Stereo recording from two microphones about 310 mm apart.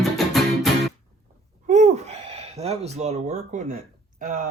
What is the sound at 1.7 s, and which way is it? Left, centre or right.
Speech, right.